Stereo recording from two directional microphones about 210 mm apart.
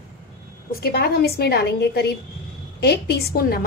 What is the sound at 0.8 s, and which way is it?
A woman's voice, 50° left (ahead or behind).